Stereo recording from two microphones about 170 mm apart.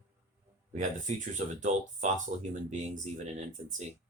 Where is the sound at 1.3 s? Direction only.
45° right (ahead or behind).